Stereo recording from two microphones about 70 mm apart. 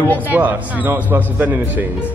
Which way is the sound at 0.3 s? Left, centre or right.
Right.